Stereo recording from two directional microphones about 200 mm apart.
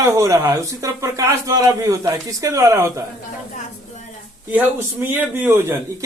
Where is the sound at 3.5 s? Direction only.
35° left (ahead or behind).